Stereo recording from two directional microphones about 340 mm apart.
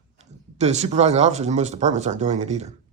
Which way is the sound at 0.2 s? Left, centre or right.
Centre.